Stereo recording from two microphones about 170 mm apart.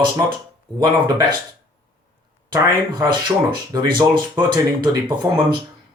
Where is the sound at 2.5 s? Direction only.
25° right (ahead or behind).